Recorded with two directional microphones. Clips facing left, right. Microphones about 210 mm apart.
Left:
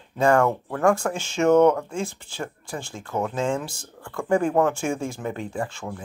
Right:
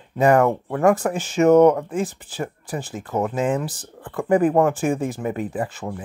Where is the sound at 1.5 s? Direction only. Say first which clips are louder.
Right 3 dB; 15° right (ahead or behind).